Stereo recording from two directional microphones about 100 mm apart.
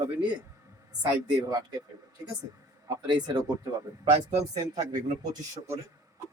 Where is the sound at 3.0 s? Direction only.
45° right (ahead or behind).